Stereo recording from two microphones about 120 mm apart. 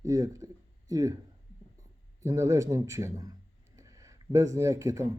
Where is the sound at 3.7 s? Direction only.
25° right (ahead or behind).